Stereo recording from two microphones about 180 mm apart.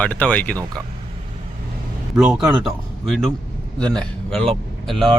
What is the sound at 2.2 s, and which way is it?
Speech, 5° right (ahead or behind).